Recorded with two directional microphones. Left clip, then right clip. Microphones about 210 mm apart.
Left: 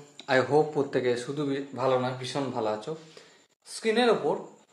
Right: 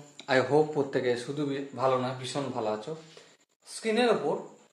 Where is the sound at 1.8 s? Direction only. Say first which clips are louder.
Left 1 dB; 35° left (ahead or behind).